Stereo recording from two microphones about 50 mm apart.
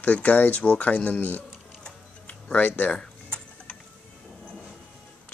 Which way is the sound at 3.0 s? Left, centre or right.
Left.